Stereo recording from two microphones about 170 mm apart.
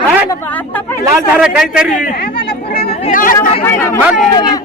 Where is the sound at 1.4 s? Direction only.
5° right (ahead or behind).